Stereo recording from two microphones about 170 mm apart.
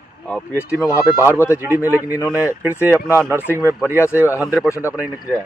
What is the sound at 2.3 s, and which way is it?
Speech, 10° right (ahead or behind).